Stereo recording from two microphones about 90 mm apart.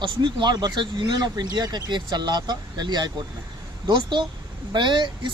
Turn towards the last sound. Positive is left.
turn(degrees=-60)  # may be behind; listen again after turning